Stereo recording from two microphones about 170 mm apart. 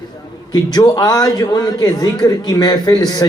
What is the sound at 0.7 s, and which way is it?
A man's voice, 25° left (ahead or behind).